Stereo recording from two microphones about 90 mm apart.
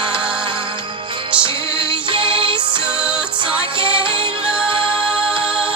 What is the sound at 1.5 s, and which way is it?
Music, 75° right (ahead or behind).